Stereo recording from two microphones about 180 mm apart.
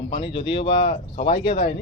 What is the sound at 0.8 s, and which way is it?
Speech, 45° left (ahead or behind).